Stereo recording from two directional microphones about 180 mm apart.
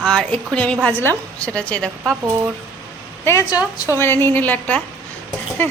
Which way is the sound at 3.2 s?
15° left (ahead or behind).